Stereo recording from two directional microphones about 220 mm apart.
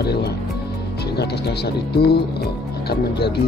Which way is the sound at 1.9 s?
45° left (ahead or behind).